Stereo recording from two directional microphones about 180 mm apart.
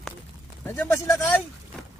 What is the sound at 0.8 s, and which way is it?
Speech, 15° left (ahead or behind).